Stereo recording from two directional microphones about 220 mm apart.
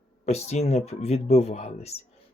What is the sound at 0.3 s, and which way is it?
Speech, 30° left (ahead or behind).